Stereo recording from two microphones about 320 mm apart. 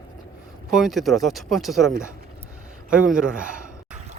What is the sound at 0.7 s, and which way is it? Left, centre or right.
Speech, centre.